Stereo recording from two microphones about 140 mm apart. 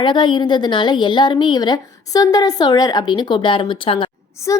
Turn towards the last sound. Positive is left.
turn(degrees=20)  # may be behind; listen again after turning